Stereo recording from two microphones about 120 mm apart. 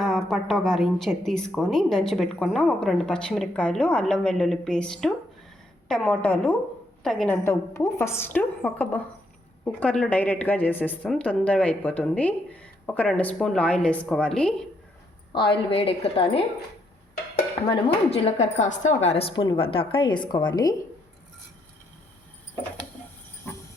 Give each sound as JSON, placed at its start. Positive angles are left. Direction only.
{"t": 0.0, "sound": "speech", "side_deg": 5}
{"t": 7.4, "sound": "a woman's voice", "side_deg": 20}
{"t": 15.3, "sound": "a woman's voice", "side_deg": 45}
{"t": 17.7, "sound": "a woman's voice", "side_deg": 55}
{"t": 19.3, "sound": "a woman's voice", "side_deg": 40}